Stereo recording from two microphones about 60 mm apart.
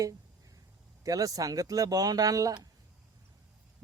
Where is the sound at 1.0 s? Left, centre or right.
Right.